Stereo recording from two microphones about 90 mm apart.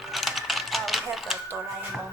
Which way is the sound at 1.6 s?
10° right (ahead or behind).